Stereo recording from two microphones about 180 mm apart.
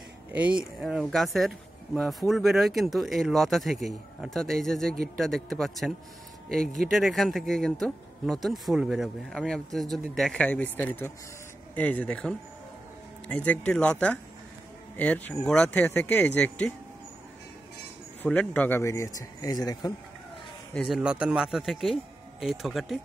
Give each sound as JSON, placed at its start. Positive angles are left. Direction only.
{"t": 0.3, "sound": "speech", "side_deg": -10}
{"t": 6.6, "sound": "speech", "side_deg": -50}
{"t": 6.9, "sound": "speech", "side_deg": 0}
{"t": 18.2, "sound": "speech", "side_deg": 5}
{"t": 20.7, "sound": "speech", "side_deg": 0}